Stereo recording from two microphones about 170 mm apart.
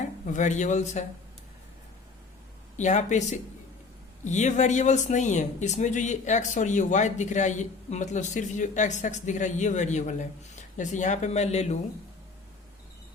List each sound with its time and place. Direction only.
0.3 s speech: 45° left (ahead or behind)
2.7 s speech: 45° left (ahead or behind)